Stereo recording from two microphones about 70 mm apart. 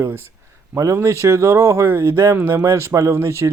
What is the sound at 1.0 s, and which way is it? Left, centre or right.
Speech, right.